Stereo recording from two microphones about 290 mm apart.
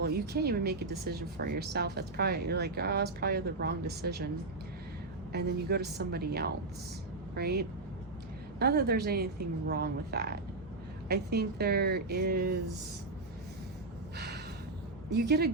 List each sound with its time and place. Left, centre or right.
0.0 s speech: right
5.3 s speech: right
14.2 s a sound: right
15.1 s speech: right